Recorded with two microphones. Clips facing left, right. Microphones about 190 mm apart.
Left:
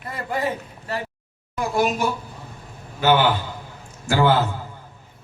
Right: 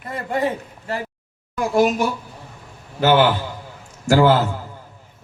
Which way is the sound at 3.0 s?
45° right (ahead or behind).